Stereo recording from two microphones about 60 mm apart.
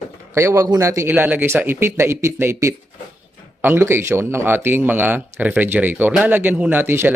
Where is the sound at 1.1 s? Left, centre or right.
Right.